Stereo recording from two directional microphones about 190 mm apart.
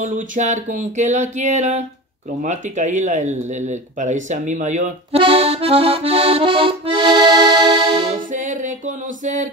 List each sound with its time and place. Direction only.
0.0 s speech: 40° right (ahead or behind)
8.3 s music: 40° right (ahead or behind)